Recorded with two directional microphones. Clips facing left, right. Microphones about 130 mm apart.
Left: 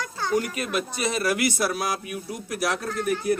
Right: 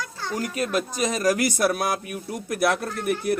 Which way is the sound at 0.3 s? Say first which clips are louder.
Right 1 dB; 35° right (ahead or behind).